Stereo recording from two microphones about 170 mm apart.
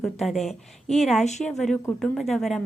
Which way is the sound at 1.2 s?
40° left (ahead or behind).